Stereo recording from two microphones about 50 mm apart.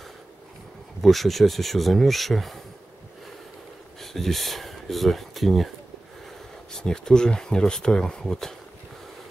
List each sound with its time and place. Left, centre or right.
1.0 s speech: centre
4.0 s speech: centre
6.7 s speech: centre